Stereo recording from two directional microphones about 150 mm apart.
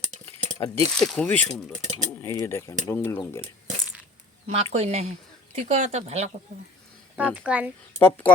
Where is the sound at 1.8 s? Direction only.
55° right (ahead or behind).